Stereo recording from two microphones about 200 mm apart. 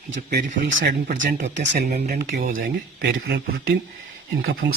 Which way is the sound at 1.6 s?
55° right (ahead or behind).